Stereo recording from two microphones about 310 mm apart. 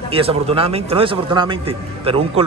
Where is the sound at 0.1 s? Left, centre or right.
Centre.